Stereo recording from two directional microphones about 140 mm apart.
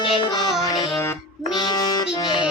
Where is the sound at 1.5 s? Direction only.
30° left (ahead or behind).